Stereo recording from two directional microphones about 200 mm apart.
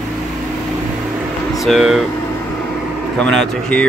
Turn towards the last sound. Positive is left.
turn(degrees=5)  # may be behind; listen again after turning